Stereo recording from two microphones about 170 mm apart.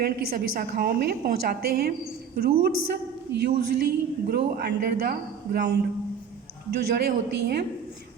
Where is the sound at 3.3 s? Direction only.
75° right (ahead or behind).